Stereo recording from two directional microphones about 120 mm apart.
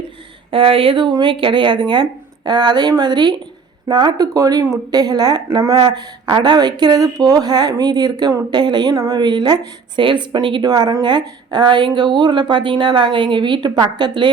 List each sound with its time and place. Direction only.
0.5 s speech: 50° right (ahead or behind)